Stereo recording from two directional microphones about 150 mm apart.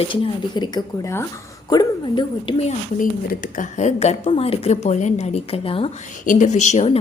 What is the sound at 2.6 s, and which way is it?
A woman's voice, 50° left (ahead or behind).